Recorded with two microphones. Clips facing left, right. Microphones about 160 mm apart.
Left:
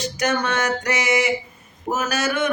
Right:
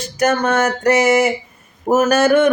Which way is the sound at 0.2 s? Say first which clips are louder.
Right 7 dB; 50° right (ahead or behind).